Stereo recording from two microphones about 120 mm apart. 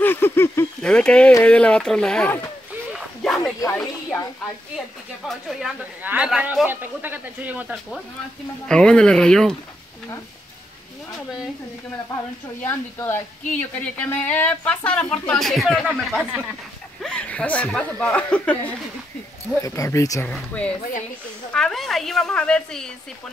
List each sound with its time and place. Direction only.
0.0 s a sound: 20° left (ahead or behind)
0.8 s speech: 10° left (ahead or behind)
3.2 s dog: centre (ahead or behind)
5.3 s a woman's voice: centre (ahead or behind)
8.6 s speech: 5° left (ahead or behind)
12.6 s a woman's voice: 20° left (ahead or behind)
19.6 s speech: 25° left (ahead or behind)
20.2 s a woman's voice: 10° left (ahead or behind)